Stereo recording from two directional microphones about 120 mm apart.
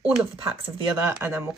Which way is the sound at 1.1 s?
20° right (ahead or behind).